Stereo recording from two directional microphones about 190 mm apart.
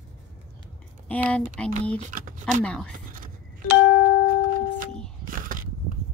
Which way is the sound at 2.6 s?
5° left (ahead or behind).